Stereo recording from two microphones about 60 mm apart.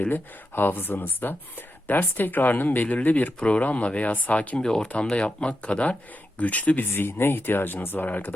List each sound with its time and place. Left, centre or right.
0.0 s speech: left
4.6 s speech: centre
6.9 s speech: left